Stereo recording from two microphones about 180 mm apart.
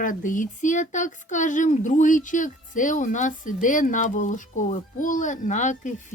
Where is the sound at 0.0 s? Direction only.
45° left (ahead or behind).